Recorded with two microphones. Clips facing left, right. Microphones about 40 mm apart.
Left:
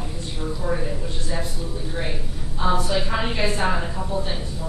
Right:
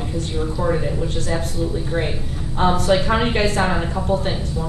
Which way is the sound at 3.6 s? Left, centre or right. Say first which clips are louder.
Right 3 dB; right.